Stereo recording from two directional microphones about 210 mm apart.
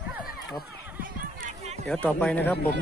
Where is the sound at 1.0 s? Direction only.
35° right (ahead or behind).